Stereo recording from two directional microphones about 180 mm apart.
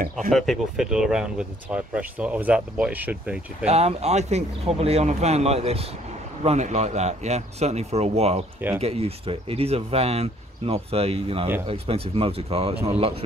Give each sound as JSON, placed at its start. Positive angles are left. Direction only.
{"t": 0.3, "sound": "speech", "side_deg": 0}
{"t": 3.6, "sound": "speech", "side_deg": -35}